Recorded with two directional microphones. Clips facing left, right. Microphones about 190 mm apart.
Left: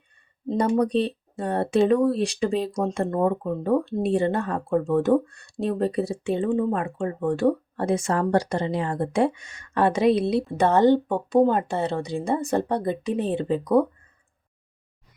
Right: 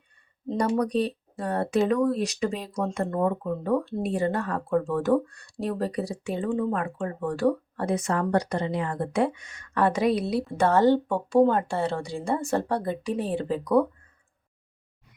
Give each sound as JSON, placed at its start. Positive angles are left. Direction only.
{"t": 0.5, "sound": "speech", "side_deg": 25}